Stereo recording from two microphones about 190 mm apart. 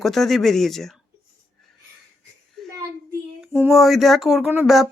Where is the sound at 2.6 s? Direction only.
Centre (ahead or behind).